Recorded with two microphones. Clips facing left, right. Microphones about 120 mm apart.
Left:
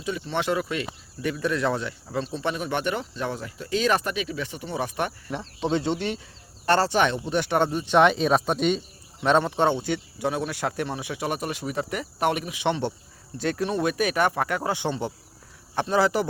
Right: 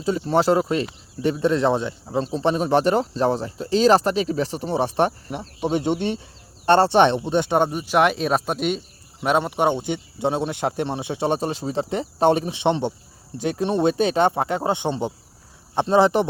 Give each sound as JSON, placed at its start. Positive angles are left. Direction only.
{"t": 0.0, "sound": "speech", "side_deg": -35}
{"t": 5.5, "sound": "speech", "side_deg": -15}